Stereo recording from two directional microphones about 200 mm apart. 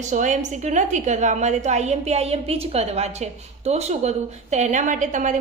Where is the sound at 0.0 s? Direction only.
40° right (ahead or behind).